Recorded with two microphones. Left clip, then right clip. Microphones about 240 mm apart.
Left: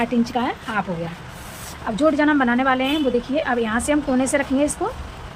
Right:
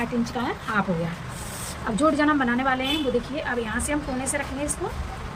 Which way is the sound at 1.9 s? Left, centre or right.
Centre.